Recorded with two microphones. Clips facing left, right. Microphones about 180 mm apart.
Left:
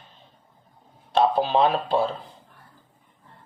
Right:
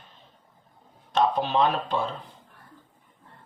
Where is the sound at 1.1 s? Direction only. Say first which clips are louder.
Left 3 dB; 35° left (ahead or behind).